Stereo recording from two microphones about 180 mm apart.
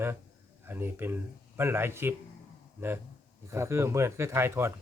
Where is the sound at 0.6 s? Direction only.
10° right (ahead or behind).